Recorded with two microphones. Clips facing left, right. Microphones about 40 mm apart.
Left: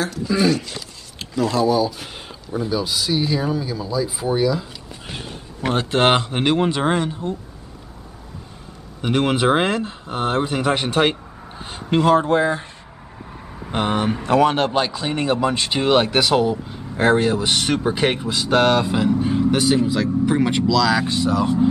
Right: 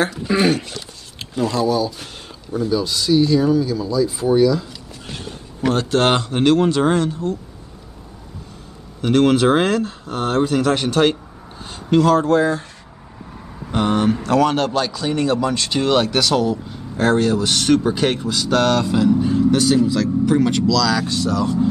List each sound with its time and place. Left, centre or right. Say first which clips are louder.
0.0 s speech: right 2 dB; right
1.5 s speech: left 1 dB; centre
9.0 s a man's voice: right 4 dB; centre